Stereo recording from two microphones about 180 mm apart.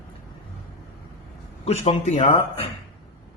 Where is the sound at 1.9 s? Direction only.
35° left (ahead or behind).